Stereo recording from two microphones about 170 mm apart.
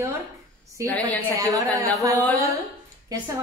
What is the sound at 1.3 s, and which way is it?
Speech, 20° right (ahead or behind).